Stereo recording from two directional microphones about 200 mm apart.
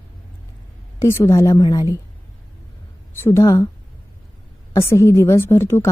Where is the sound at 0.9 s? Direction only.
15° left (ahead or behind).